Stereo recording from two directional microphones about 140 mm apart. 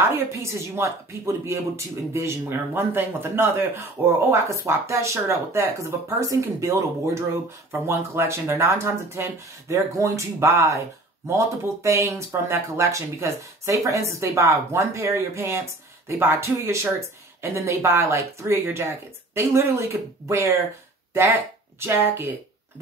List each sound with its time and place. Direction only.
0.3 s speech: 20° right (ahead or behind)
21.7 s speech: 15° right (ahead or behind)